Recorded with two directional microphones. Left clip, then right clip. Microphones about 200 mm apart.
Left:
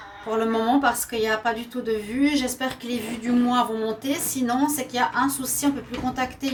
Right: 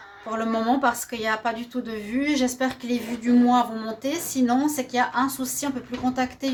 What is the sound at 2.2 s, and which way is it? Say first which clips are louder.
Speech: right 1 dB; 50° right (ahead or behind).